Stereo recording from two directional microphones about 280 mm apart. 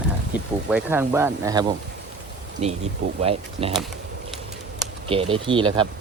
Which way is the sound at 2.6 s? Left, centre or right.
Right.